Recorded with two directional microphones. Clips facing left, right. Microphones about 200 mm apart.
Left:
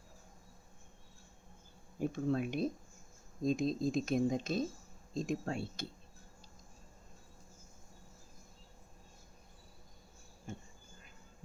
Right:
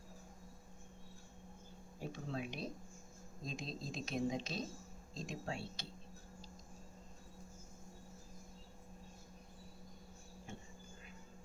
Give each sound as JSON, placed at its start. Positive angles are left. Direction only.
{"t": 2.0, "sound": "speech", "side_deg": 50}